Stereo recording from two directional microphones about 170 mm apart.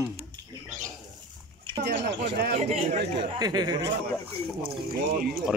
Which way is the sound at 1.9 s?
90° right.